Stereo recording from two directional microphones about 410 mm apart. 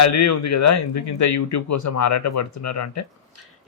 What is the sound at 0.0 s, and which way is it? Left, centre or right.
A man's voice, left.